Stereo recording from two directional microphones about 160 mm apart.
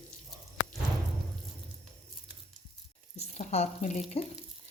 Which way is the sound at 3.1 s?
45° left (ahead or behind).